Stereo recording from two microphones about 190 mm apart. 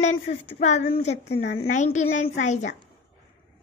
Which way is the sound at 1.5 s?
40° left (ahead or behind).